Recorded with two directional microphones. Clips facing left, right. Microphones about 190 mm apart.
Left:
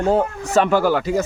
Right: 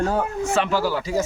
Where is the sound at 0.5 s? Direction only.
50° left (ahead or behind).